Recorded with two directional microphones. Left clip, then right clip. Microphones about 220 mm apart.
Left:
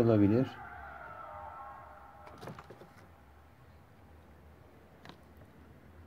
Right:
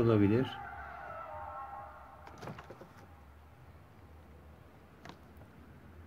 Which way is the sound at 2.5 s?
Centre (ahead or behind).